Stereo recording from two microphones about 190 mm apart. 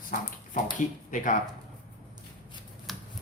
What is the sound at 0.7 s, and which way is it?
Speech, 45° left (ahead or behind).